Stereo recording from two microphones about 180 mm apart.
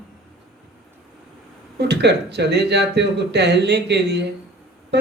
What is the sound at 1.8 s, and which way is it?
Speech, 70° right (ahead or behind).